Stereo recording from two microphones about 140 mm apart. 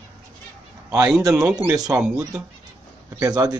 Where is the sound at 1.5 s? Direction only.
15° right (ahead or behind).